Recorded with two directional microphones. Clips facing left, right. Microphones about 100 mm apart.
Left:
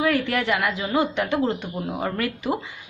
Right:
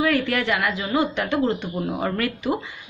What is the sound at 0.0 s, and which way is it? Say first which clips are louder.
A woman's voice: right 1 dB; 25° left (ahead or behind).